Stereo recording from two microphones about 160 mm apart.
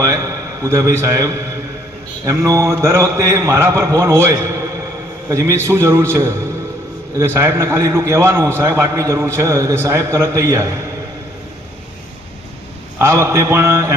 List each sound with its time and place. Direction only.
0.0 s a man's voice: 20° right (ahead or behind)
13.0 s a man's voice: 15° right (ahead or behind)